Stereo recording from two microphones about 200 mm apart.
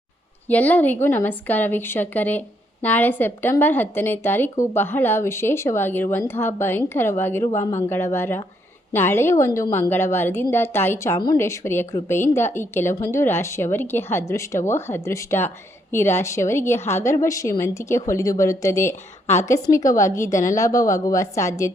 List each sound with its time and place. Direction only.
0.4 s a woman's voice: 10° left (ahead or behind)